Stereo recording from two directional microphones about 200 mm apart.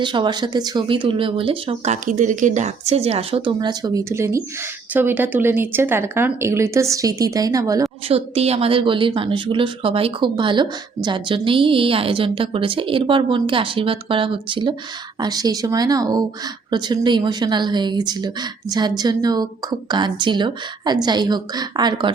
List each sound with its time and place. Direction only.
0.0 s a woman's voice: 20° right (ahead or behind)
8.0 s a woman's voice: 30° right (ahead or behind)